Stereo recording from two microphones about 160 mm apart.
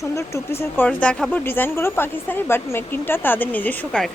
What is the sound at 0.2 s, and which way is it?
Speech, 15° left (ahead or behind).